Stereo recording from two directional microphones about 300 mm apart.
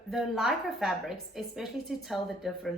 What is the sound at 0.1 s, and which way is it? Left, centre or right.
A woman's voice, centre.